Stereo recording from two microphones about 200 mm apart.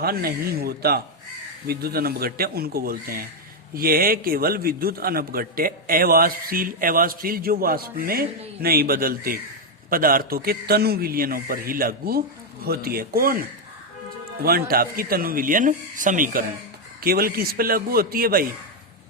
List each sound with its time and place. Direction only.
0.0 s a man's voice: 50° right (ahead or behind)
14.4 s a man's voice: 50° right (ahead or behind)